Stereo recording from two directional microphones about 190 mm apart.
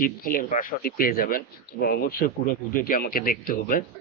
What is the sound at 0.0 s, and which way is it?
Speech, 50° left (ahead or behind).